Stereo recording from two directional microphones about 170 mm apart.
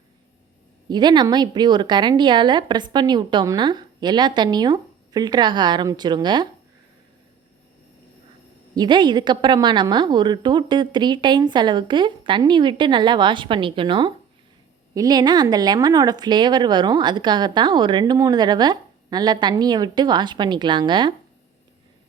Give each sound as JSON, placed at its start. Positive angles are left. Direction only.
{"t": 0.9, "sound": "speech", "side_deg": -25}
{"t": 8.7, "sound": "speech", "side_deg": -25}